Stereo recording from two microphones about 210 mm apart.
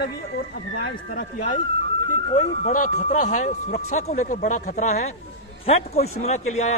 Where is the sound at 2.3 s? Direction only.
30° left (ahead or behind).